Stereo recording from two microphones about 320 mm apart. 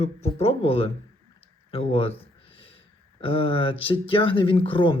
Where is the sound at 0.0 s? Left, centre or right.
Centre.